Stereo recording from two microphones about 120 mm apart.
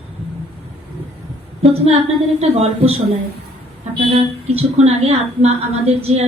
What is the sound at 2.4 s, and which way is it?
Speech, 60° right (ahead or behind).